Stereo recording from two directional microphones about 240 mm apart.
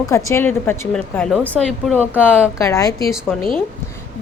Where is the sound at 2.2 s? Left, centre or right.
Centre.